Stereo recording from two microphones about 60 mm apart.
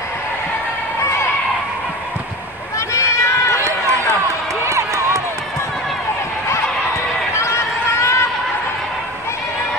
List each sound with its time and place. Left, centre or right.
2.9 s run: left
4.6 s run: right
7.3 s run: left